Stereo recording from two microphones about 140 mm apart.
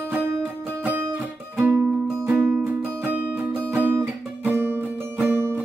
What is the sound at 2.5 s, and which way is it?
Music, 5° right (ahead or behind).